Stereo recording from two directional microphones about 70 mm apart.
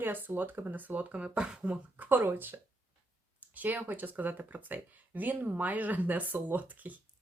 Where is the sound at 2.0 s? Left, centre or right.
Right.